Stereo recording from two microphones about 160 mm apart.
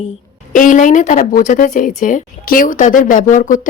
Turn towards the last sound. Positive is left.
turn(degrees=55)  # may be behind; listen again after turning